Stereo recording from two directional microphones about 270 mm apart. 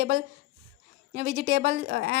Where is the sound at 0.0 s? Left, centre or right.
Right.